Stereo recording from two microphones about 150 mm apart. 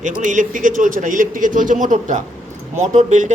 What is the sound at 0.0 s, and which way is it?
Speech, 55° right (ahead or behind).